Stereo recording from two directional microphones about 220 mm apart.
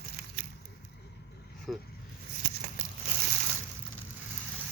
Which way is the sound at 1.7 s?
Centre (ahead or behind).